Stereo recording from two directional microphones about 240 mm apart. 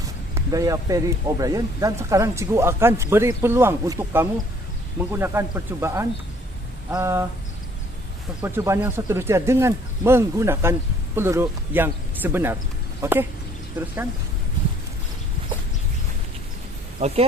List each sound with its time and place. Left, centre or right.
0.3 s speech: centre
8.4 s speech: centre
17.0 s speech: right